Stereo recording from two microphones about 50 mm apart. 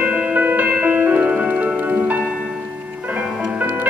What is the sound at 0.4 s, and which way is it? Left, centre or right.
Music, right.